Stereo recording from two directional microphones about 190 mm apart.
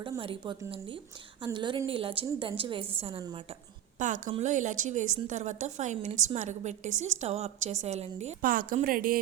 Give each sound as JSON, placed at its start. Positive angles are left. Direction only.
{"t": 0.0, "sound": "a woman's voice", "side_deg": -25}
{"t": 3.9, "sound": "a woman's voice", "side_deg": -40}
{"t": 8.4, "sound": "a woman's voice", "side_deg": -45}